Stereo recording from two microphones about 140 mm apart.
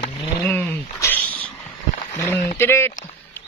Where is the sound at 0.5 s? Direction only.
15° left (ahead or behind).